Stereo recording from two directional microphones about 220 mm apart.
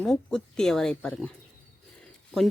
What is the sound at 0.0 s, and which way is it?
Speech, 5° left (ahead or behind).